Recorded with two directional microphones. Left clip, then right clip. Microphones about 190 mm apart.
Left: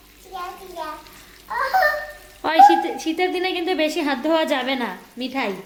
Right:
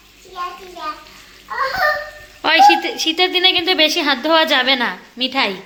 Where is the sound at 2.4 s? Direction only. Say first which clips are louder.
Right 2 dB; 10° left (ahead or behind).